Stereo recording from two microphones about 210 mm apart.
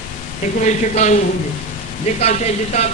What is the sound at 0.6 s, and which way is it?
Speech, 35° left (ahead or behind).